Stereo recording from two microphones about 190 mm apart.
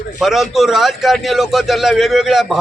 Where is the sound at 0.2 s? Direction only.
Centre (ahead or behind).